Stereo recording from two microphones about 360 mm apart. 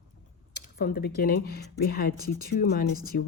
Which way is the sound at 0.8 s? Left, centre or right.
Left.